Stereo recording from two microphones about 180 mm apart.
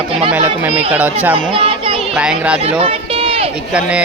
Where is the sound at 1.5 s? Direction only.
30° right (ahead or behind).